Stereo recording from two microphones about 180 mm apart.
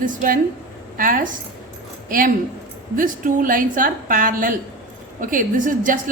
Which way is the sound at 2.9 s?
50° right (ahead or behind).